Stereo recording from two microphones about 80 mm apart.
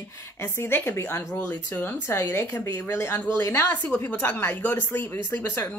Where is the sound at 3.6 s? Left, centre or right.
Left.